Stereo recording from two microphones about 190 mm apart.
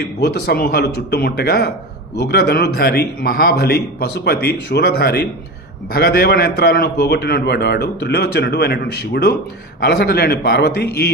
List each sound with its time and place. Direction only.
0.0 s a man's voice: 55° left (ahead or behind)